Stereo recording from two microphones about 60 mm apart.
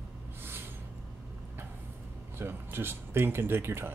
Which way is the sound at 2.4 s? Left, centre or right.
Right.